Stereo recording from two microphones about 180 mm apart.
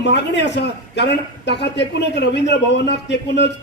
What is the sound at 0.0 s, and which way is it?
A man's voice, 75° left (ahead or behind).